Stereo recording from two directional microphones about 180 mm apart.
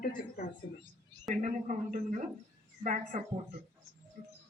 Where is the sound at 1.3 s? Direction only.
45° right (ahead or behind).